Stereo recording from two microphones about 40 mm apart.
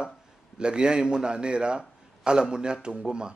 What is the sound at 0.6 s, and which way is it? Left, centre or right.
A man's voice, right.